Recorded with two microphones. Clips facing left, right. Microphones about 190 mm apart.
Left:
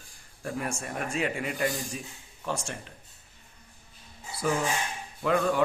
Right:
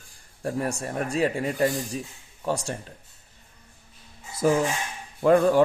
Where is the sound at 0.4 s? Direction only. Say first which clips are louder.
Right 5 dB; 35° right (ahead or behind).